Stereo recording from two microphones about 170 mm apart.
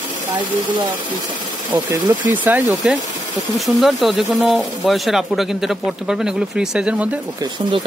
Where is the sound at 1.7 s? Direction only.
15° right (ahead or behind).